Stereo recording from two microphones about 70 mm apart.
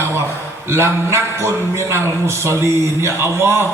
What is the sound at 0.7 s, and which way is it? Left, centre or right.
A man's voice, right.